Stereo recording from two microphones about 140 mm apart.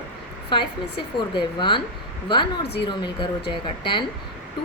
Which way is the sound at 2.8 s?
35° left (ahead or behind).